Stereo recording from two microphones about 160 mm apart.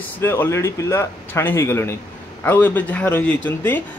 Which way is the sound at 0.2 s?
15° left (ahead or behind).